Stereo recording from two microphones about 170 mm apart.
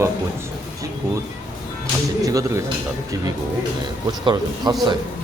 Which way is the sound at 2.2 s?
20° right (ahead or behind).